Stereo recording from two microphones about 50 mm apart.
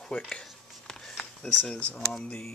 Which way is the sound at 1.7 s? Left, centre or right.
Centre.